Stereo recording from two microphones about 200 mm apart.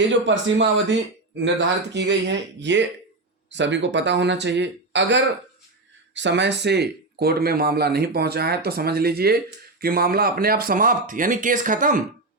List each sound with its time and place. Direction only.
0.1 s speech: 70° right (ahead or behind); by 12.0 s 40° right (ahead or behind)